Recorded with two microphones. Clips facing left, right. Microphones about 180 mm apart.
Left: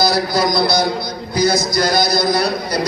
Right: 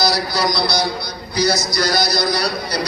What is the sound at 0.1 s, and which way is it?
A man's voice, 50° left (ahead or behind).